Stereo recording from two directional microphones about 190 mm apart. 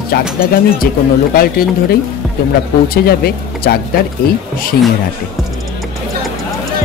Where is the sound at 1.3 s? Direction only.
50° left (ahead or behind).